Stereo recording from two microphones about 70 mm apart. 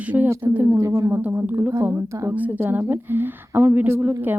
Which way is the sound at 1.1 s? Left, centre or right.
Right.